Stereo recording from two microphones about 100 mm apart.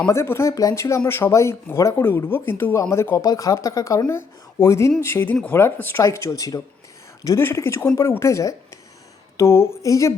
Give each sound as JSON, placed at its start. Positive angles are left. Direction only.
{"t": 0.0, "sound": "speech", "side_deg": 25}
{"t": 7.3, "sound": "speech", "side_deg": 25}